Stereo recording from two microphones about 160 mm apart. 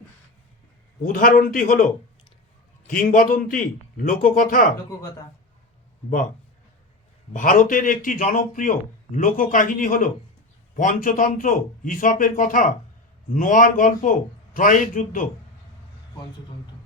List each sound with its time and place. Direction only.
1.0 s speech: 60° left (ahead or behind)
7.3 s a man's voice: 55° left (ahead or behind)